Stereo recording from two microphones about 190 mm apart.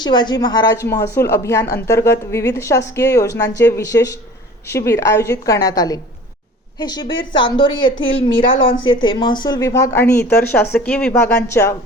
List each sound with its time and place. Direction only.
0.0 s a woman's voice: 25° left (ahead or behind)